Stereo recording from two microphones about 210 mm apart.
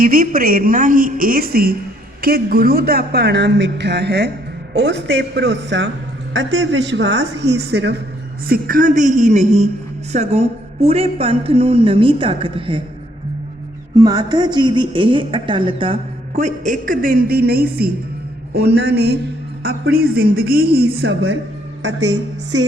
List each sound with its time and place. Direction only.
0.0 s a woman's voice: 45° right (ahead or behind); by 12.8 s 25° right (ahead or behind)
13.9 s a woman's voice: 15° right (ahead or behind); by 22.7 s 60° right (ahead or behind)